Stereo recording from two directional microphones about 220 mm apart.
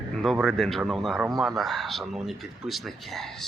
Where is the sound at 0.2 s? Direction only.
Centre (ahead or behind).